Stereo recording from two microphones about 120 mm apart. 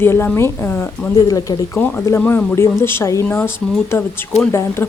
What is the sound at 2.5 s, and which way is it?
Speech, 20° left (ahead or behind).